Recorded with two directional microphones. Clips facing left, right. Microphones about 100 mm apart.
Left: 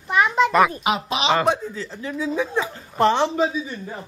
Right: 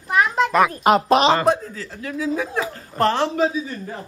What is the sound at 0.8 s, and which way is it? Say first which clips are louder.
Speech: right 8 dB; 45° right (ahead or behind).